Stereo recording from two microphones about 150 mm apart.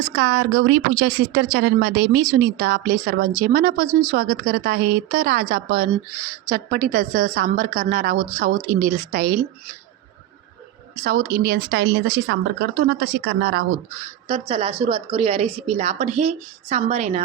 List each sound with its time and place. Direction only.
0.2 s speech: 90° right; by 9.4 s 65° right (ahead or behind)
11.0 s speech: 65° right (ahead or behind); by 13.7 s 90° right
14.3 s a woman's voice: 40° right (ahead or behind)